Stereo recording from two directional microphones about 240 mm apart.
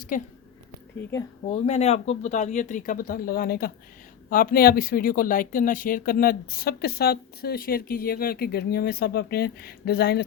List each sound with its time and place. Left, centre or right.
0.1 s speech: left
1.5 s speech: left